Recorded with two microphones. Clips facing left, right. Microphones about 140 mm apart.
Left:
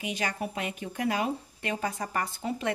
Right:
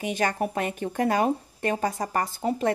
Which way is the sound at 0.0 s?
50° right (ahead or behind).